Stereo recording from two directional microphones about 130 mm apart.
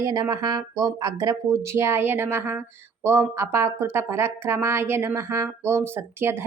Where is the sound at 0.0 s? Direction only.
25° right (ahead or behind).